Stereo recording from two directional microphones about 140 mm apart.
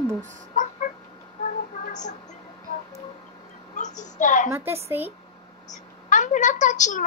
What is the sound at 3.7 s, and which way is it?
Speech, 60° left (ahead or behind).